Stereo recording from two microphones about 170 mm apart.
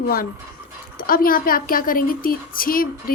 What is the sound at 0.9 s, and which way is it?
Speech, 60° left (ahead or behind).